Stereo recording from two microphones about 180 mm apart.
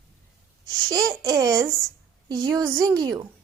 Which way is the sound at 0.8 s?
20° right (ahead or behind).